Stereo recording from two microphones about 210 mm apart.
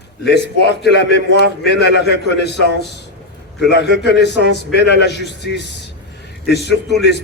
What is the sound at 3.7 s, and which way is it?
A man's voice, 55° left (ahead or behind).